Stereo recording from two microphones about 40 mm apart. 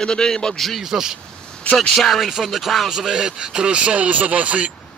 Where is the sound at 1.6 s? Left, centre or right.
Left.